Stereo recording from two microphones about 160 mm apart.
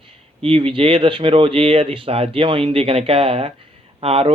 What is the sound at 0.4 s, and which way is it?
Speech, 35° right (ahead or behind).